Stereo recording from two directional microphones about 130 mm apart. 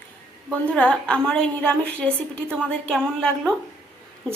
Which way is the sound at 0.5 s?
10° left (ahead or behind).